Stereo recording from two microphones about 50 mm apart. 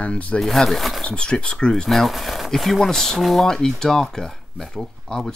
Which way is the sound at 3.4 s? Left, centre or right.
Centre.